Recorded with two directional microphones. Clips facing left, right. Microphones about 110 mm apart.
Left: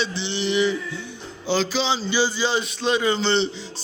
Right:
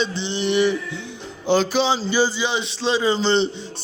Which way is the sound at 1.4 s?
50° right (ahead or behind).